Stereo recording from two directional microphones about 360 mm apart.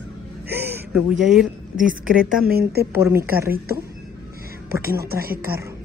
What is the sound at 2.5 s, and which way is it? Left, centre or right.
Speech, right.